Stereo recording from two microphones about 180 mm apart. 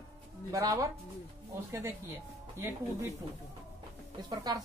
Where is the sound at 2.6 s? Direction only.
15° right (ahead or behind).